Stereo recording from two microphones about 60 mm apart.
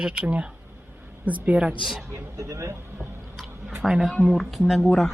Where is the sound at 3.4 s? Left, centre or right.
Centre.